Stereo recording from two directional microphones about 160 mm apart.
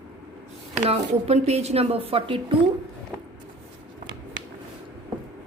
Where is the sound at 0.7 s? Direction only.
40° right (ahead or behind).